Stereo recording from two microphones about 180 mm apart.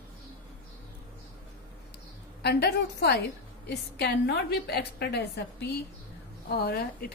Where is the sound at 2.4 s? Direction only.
65° left (ahead or behind).